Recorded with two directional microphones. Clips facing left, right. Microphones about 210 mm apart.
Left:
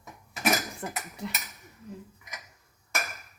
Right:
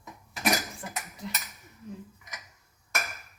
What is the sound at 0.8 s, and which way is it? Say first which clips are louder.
Speech: left 4 dB; 50° left (ahead or behind).